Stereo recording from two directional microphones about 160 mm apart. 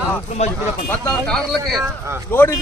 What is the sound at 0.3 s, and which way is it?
Speech, 45° left (ahead or behind).